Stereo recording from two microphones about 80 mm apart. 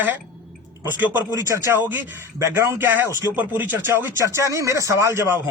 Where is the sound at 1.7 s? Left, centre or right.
Right.